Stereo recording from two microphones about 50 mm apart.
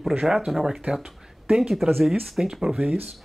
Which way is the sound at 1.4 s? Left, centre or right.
Centre.